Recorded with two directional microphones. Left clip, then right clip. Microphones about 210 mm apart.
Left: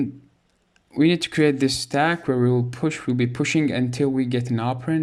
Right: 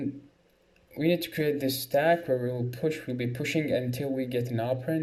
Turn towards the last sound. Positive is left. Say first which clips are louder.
# left 5 dB
turn(degrees=50)  # may be behind; listen again after turning